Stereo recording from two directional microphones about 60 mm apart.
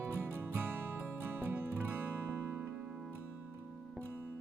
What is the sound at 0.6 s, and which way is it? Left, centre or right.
Music, right.